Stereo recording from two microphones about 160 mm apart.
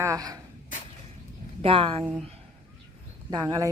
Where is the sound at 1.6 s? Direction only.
35° right (ahead or behind).